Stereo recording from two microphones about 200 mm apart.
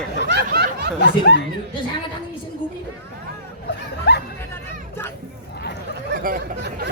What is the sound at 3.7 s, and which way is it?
Music, 55° left (ahead or behind).